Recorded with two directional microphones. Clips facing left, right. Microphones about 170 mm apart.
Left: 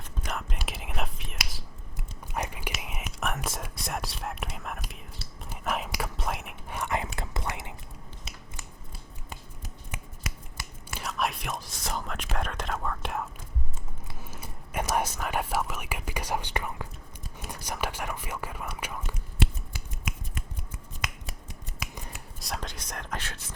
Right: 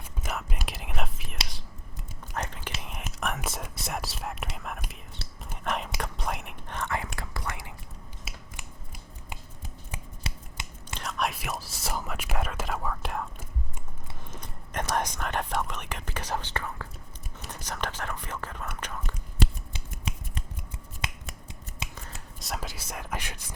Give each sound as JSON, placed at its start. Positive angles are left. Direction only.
{"t": 0.3, "sound": "whispering", "side_deg": -5}
{"t": 2.2, "sound": "whispering", "side_deg": 10}
{"t": 8.5, "sound": "scissors", "side_deg": -15}
{"t": 10.2, "sound": "finger snapping", "side_deg": -25}
{"t": 11.0, "sound": "whispering", "side_deg": 0}
{"t": 19.7, "sound": "scissors", "side_deg": -30}
{"t": 21.0, "sound": "finger snapping", "side_deg": -25}
{"t": 21.9, "sound": "finger snapping", "side_deg": 15}
{"t": 22.4, "sound": "a sound", "side_deg": 0}